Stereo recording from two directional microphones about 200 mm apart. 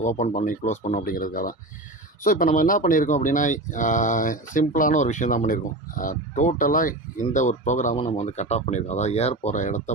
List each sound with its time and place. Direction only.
0.0 s speech: 35° left (ahead or behind)